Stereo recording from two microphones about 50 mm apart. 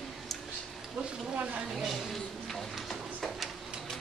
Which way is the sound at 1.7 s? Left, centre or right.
Centre.